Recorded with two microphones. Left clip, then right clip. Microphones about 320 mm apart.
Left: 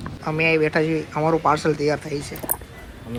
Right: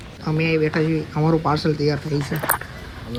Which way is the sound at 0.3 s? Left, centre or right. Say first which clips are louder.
Left 2 dB; centre.